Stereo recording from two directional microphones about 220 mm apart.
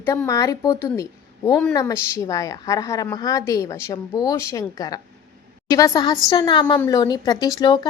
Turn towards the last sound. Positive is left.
turn(degrees=20)  # may be behind; listen again after turning